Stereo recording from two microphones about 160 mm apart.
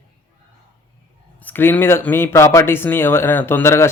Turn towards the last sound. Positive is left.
turn(degrees=15)  # may be behind; listen again after turning